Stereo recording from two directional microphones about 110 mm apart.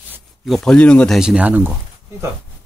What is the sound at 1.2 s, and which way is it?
Speech, 10° right (ahead or behind).